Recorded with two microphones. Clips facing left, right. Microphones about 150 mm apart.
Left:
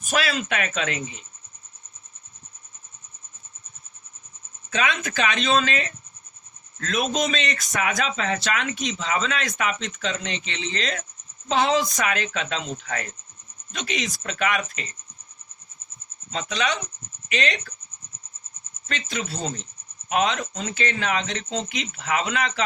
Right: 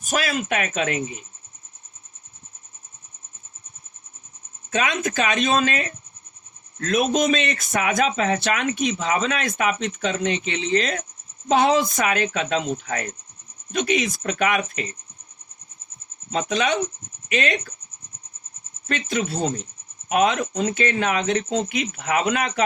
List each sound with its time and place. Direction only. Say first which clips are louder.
0.0 s speech: right 1 dB; 45° right (ahead or behind)
4.7 s speech: right 2 dB; 45° right (ahead or behind)
16.3 s speech: right 5 dB; 50° right (ahead or behind)
18.9 s speech: right 6 dB; 50° right (ahead or behind)